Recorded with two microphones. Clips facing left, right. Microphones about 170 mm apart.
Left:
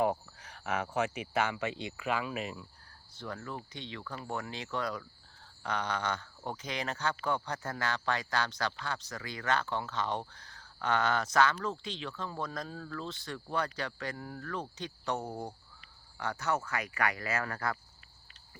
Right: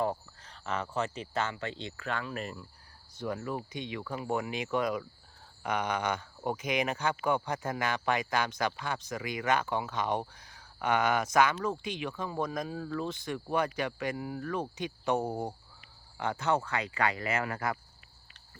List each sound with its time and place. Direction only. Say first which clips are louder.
0.0 s cricket: left 2 dB; 15° left (ahead or behind)
0.6 s speech: left 1 dB; 10° left (ahead or behind)
3.2 s speech: right 6 dB; 15° right (ahead or behind)